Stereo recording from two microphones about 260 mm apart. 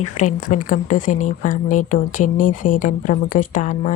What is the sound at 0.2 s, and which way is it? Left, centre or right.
Speech, left.